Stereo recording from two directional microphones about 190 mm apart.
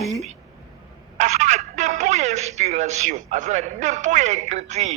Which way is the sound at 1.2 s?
40° right (ahead or behind).